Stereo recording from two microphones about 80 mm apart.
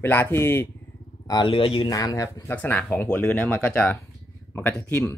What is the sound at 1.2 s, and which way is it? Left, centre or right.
Speech, left.